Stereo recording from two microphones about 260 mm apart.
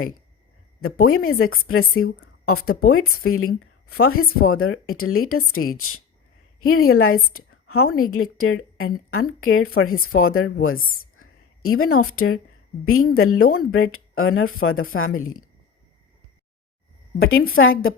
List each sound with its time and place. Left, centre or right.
0.8 s a woman's voice: left
17.4 s a woman's voice: left